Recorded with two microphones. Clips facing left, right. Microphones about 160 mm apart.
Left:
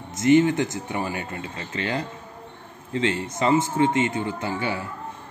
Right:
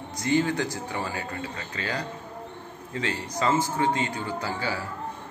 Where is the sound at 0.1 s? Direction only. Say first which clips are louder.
Left 7 dB; 20° left (ahead or behind).